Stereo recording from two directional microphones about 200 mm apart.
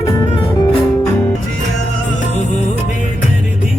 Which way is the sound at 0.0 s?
20° left (ahead or behind).